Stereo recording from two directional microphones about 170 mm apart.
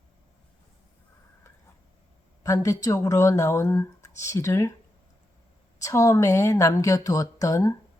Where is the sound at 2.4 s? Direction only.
20° left (ahead or behind).